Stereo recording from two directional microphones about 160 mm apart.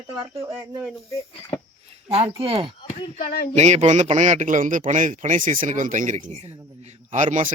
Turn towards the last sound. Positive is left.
turn(degrees=-50)  # may be behind; listen again after turning